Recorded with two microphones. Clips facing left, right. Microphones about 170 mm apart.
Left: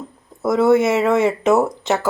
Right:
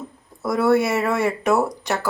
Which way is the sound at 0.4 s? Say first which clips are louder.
Left 4 dB; 20° left (ahead or behind).